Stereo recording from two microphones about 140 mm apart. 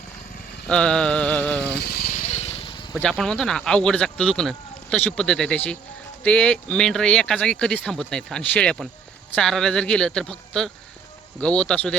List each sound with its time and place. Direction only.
0.7 s mantra: 5° left (ahead or behind)
1.9 s vehicle: 80° left; by 2.9 s 35° left (ahead or behind)
2.9 s speech: centre (ahead or behind)
11.3 s mantra: 10° left (ahead or behind)